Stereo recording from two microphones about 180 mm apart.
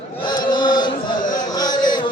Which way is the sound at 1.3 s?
20° left (ahead or behind).